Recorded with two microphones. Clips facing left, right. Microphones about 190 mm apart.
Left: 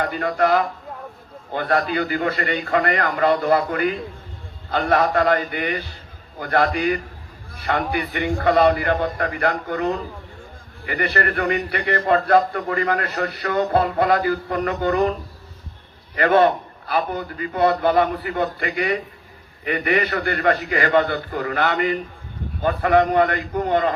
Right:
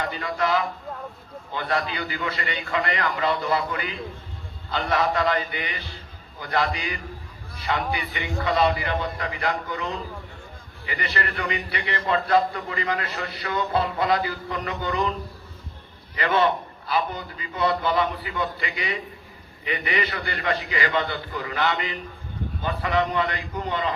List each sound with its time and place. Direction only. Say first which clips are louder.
0.0 s a man's voice: left 6 dB; 50° left (ahead or behind)
16.1 s a man's voice: left 6 dB; 50° left (ahead or behind)